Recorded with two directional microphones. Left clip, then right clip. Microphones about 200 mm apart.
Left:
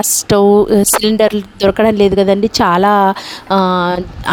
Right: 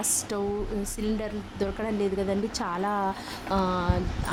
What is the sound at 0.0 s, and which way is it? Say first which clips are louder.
A woman's voice: left 19 dB; 45° left (ahead or behind).